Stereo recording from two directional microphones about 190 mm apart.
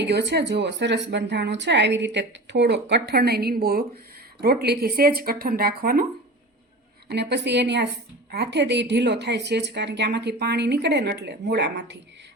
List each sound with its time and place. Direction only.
0.1 s a woman's voice: 60° right (ahead or behind)
7.1 s speech: 60° right (ahead or behind)